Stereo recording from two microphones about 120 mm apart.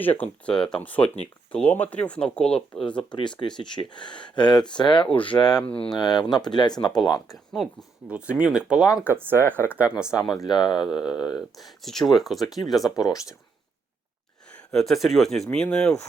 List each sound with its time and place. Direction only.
0.0 s speech: 15° left (ahead or behind)
3.1 s speech: 40° left (ahead or behind)
5.6 s speech: 50° left (ahead or behind)
6.0 s speech: 35° left (ahead or behind)
7.5 s speech: centre (ahead or behind)
8.1 s speech: 10° right (ahead or behind)
10.3 s speech: 35° left (ahead or behind)
10.8 s speech: 5° right (ahead or behind)
13.0 s speech: 30° left (ahead or behind)
14.5 s speech: 5° left (ahead or behind)